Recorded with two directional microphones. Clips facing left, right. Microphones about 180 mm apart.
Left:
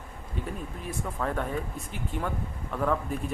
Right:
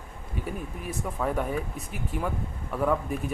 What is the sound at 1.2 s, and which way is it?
Speech, 10° right (ahead or behind).